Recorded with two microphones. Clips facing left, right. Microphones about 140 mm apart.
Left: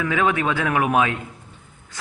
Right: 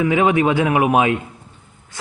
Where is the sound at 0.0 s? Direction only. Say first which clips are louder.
Right 5 dB; 20° right (ahead or behind).